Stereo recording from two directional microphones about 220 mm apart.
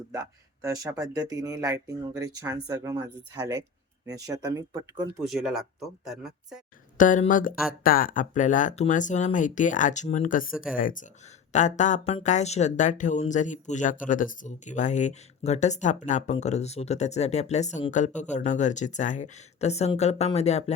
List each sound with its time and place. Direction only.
0.1 s speech: 15° right (ahead or behind)
5.2 s speech: centre (ahead or behind)
6.9 s speech: 35° left (ahead or behind)